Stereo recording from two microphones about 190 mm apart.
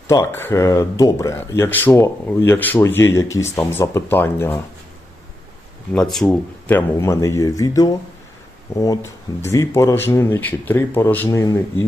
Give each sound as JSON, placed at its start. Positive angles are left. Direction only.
{"t": 0.1, "sound": "speech", "side_deg": 15}
{"t": 5.9, "sound": "speech", "side_deg": 5}